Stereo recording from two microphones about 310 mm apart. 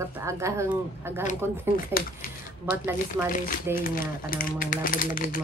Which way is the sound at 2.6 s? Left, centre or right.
Centre.